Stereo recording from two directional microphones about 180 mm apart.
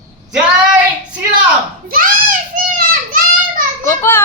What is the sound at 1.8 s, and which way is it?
Child singing, 50° right (ahead or behind).